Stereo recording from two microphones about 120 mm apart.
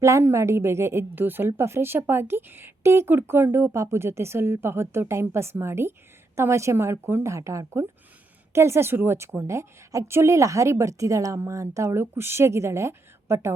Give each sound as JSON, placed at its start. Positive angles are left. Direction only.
{"t": 0.0, "sound": "a woman's voice", "side_deg": -25}